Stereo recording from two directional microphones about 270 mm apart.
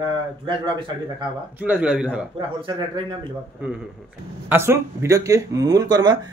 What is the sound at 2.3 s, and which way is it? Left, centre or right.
Speech, centre.